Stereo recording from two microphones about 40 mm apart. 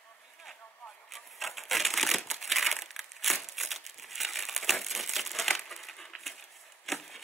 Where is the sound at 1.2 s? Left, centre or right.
Centre.